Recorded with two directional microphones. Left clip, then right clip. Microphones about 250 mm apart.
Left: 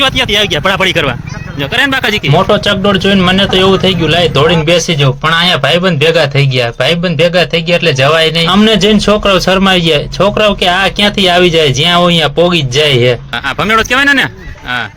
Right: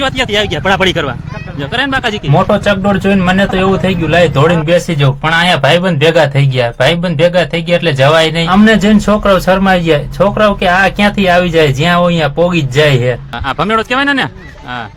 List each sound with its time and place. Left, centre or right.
0.0 s speech: centre
2.5 s a man's voice: left
13.6 s speech: centre